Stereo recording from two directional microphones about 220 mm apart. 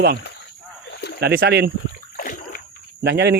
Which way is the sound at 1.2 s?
45° right (ahead or behind).